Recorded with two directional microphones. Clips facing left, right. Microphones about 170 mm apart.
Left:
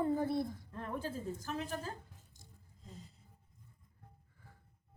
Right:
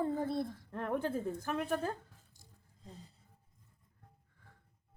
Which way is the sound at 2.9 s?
35° right (ahead or behind).